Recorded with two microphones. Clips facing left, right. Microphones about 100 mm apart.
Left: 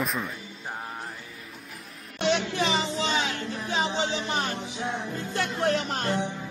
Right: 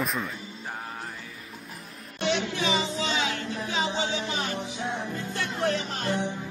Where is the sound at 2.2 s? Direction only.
55° left (ahead or behind).